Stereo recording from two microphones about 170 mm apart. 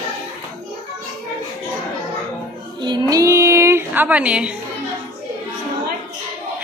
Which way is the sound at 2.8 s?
25° right (ahead or behind).